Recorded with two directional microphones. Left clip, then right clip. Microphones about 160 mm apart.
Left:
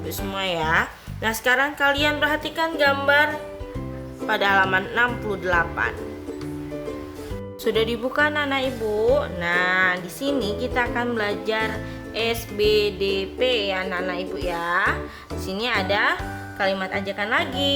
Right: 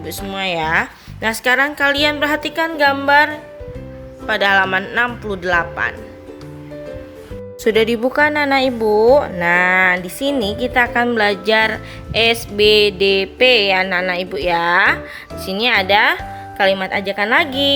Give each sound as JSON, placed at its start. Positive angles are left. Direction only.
{"t": 0.2, "sound": "a woman's voice", "side_deg": -25}
{"t": 4.3, "sound": "a woman's voice", "side_deg": -25}
{"t": 7.6, "sound": "a woman's voice", "side_deg": -30}